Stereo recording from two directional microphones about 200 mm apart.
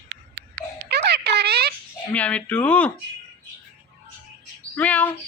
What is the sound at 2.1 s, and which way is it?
Music, 5° left (ahead or behind).